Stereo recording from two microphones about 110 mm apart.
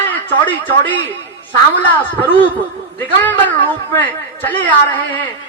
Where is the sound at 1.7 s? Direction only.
15° left (ahead or behind).